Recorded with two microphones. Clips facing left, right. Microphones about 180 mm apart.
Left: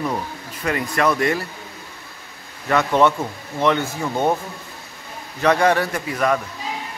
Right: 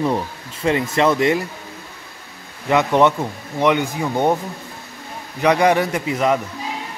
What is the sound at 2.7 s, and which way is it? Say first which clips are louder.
Speech: right 2 dB; 20° right (ahead or behind).